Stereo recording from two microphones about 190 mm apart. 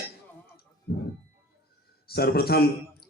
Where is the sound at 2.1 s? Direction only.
55° left (ahead or behind).